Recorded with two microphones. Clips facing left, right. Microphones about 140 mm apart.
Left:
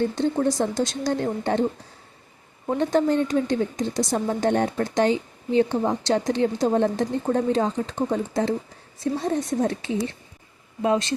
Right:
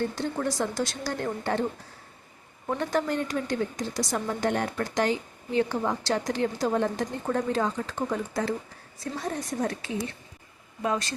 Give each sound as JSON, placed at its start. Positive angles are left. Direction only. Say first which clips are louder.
{"t": 0.2, "sound": "a woman's voice", "louder": "left 6 dB", "side_deg": 25}
{"t": 2.6, "sound": "a woman's voice", "louder": "left 6 dB", "side_deg": 25}